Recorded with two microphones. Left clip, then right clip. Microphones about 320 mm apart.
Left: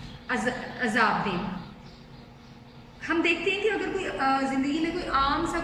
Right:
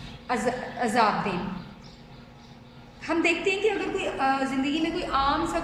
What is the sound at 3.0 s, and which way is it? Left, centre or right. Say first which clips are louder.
A woman's voice: right 1 dB; centre.